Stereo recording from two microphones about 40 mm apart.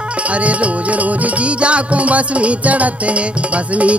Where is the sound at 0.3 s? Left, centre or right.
Right.